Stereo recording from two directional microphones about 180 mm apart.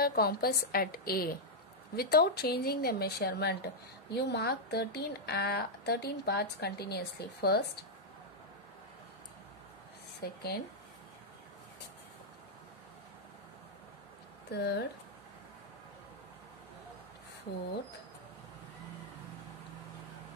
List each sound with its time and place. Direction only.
0.0 s speech: 60° left (ahead or behind)
10.2 s speech: 60° left (ahead or behind)
14.5 s speech: 65° left (ahead or behind)